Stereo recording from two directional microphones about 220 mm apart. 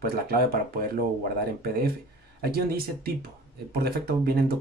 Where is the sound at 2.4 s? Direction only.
45° right (ahead or behind).